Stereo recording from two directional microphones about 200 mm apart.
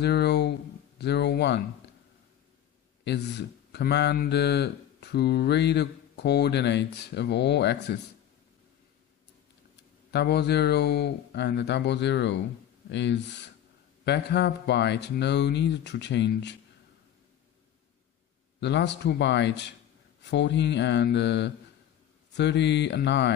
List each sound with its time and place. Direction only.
0.0 s a sound: 55° left (ahead or behind)
0.9 s speech: 60° left (ahead or behind)
3.0 s speech: 60° left (ahead or behind)
10.1 s speech: 55° left (ahead or behind)
18.6 s speech: 60° left (ahead or behind)